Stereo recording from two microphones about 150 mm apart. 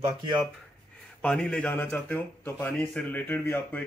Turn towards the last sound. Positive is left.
turn(degrees=10)  # may be behind; listen again after turning